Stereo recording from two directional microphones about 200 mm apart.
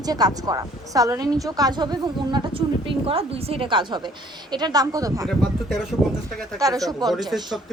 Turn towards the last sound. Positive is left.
turn(degrees=-20)  # may be behind; listen again after turning